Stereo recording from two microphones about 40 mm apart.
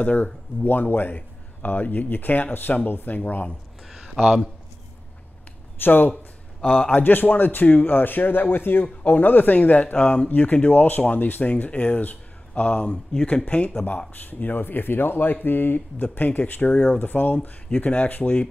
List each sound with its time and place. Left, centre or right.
0.0 s speech: left
3.9 s a sound: centre
5.8 s speech: left
6.6 s speech: left
6.9 s speech: left
9.0 s speech: left
9.9 s speech: left
10.3 s speech: left
13.8 s speech: left
17.7 s speech: left